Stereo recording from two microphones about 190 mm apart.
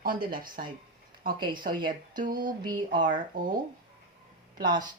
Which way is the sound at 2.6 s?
25° right (ahead or behind).